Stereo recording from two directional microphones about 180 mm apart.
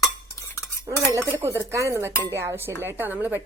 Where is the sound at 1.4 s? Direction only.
15° right (ahead or behind).